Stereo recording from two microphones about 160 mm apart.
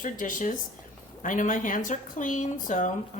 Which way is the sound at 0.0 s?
55° left (ahead or behind).